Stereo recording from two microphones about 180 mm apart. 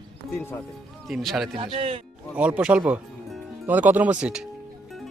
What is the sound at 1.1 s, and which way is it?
Speech, centre (ahead or behind).